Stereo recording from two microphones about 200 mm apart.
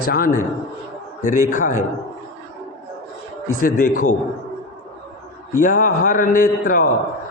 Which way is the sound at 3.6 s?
45° left (ahead or behind).